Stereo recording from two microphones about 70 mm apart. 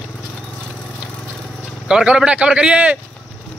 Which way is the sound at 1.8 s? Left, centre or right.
Centre.